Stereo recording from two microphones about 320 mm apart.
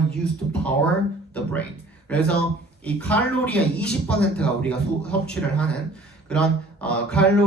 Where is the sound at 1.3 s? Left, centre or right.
Centre.